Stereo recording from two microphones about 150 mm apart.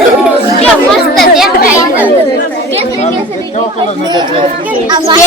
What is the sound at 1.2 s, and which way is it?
Chatter, centre (ahead or behind).